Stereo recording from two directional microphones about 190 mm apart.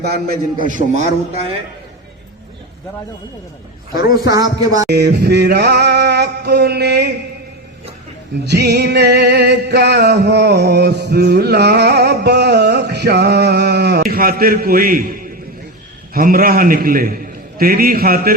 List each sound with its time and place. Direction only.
0.0 s music: 55° right (ahead or behind)
0.7 s a man's voice: 40° right (ahead or behind)
3.9 s speech: 20° right (ahead or behind)
4.9 s music: 60° right (ahead or behind)
8.4 s music: 60° right (ahead or behind)
16.1 s a man's voice: 50° right (ahead or behind)